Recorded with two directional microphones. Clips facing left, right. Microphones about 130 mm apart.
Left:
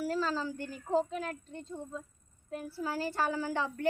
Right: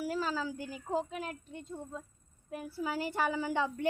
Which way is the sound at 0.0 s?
10° right (ahead or behind).